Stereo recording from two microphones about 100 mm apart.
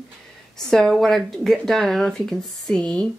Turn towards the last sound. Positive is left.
turn(degrees=10)  # may be behind; listen again after turning